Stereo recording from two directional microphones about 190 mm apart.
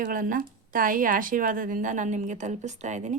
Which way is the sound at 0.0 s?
45° right (ahead or behind).